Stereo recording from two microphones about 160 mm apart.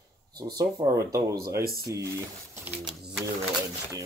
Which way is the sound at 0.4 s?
25° right (ahead or behind).